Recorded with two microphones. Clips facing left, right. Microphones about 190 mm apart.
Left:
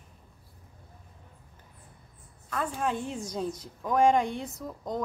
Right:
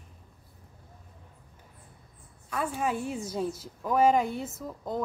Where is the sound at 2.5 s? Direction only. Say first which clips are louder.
Right 1 dB; 10° right (ahead or behind).